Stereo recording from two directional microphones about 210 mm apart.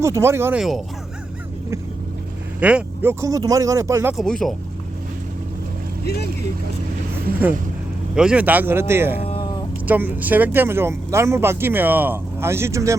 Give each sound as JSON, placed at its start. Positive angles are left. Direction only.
{"t": 0.0, "sound": "speech", "side_deg": -15}
{"t": 2.6, "sound": "speech", "side_deg": -5}
{"t": 4.2, "sound": "speech", "side_deg": 0}
{"t": 8.1, "sound": "speech", "side_deg": -5}
{"t": 9.2, "sound": "a sound", "side_deg": 25}
{"t": 9.8, "sound": "speech", "side_deg": -10}